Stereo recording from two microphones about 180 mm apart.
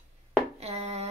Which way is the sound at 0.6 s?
35° right (ahead or behind).